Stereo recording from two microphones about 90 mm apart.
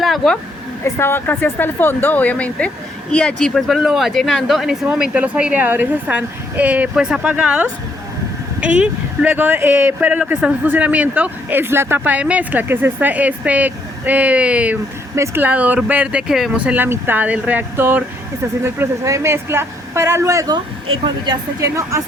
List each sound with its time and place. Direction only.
0.0 s vehicle: centre (ahead or behind)
0.9 s speech: 25° left (ahead or behind); by 3.6 s 10° left (ahead or behind)
3.7 s speech: 5° right (ahead or behind)
16.2 s speech: 5° right (ahead or behind); by 18.0 s 20° right (ahead or behind)
18.6 s speech: 30° right (ahead or behind)
21.6 s speech: 35° right (ahead or behind)